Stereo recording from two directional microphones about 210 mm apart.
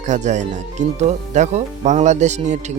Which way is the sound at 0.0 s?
35° right (ahead or behind).